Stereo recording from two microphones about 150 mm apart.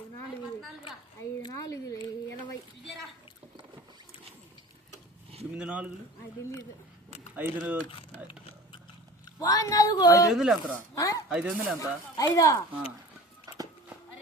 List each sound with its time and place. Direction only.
1.4 s speech: 25° left (ahead or behind)
5.5 s speech: 10° right (ahead or behind)
7.3 s speech: 10° right (ahead or behind)
7.9 s a sound: 35° left (ahead or behind)
9.4 s speech: 20° left (ahead or behind)
10.3 s speech: centre (ahead or behind)
10.9 s speech: 20° left (ahead or behind)
11.3 s speech: 5° right (ahead or behind)
11.8 s speech: 20° left (ahead or behind)